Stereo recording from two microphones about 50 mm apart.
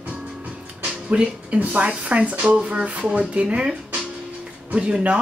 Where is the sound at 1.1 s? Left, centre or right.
Right.